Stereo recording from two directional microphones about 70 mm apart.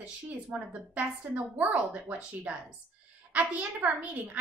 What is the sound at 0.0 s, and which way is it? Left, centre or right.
A woman's voice, centre.